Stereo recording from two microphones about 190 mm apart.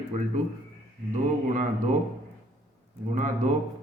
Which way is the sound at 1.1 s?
40° right (ahead or behind).